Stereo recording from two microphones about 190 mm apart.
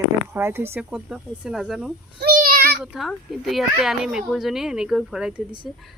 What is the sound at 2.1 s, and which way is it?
Child singing, 55° right (ahead or behind).